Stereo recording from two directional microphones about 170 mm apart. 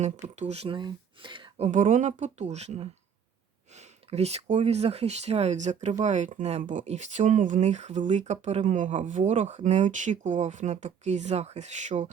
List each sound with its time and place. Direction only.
0.0 s speech: 40° right (ahead or behind)
1.6 s speech: 50° right (ahead or behind)